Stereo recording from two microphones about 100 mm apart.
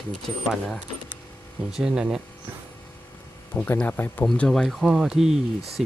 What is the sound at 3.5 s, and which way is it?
Speech, 15° left (ahead or behind).